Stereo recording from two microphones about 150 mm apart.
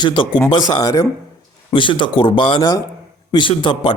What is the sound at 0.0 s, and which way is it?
A man's voice, 30° left (ahead or behind).